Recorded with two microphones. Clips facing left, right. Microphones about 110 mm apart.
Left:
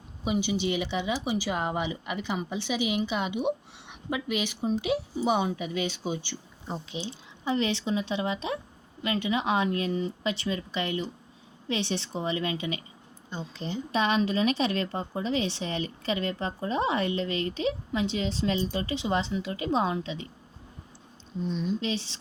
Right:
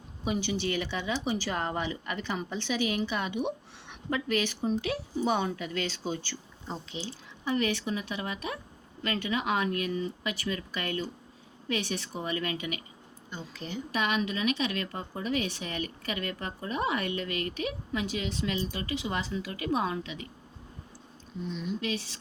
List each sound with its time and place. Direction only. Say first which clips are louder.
0.3 s speech: left 3 dB; 15° left (ahead or behind)
21.4 s speech: left 4 dB; 35° left (ahead or behind)